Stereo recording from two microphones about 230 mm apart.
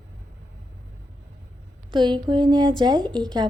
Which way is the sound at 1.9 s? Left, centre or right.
Centre.